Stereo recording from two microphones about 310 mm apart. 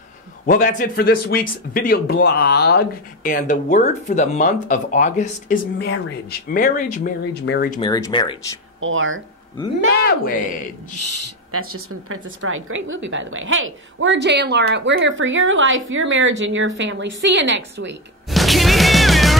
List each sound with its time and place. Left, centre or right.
0.5 s speech: left
7.8 s speech: centre
8.8 s a woman's voice: right
9.9 s speech: left
11.0 s a woman's voice: right
18.3 s music: centre